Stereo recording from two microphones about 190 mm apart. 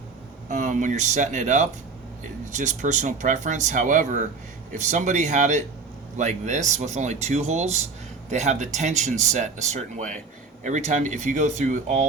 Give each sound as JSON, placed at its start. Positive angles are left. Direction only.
{"t": 0.5, "sound": "speech", "side_deg": -40}